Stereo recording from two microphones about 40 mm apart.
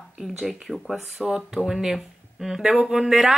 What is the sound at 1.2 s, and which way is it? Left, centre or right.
Speech, right.